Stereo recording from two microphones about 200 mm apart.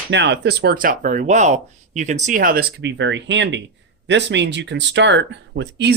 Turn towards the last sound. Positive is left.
turn(degrees=-60)  # may be behind; listen again after turning